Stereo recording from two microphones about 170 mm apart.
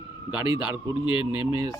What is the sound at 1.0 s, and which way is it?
Speech, 30° left (ahead or behind).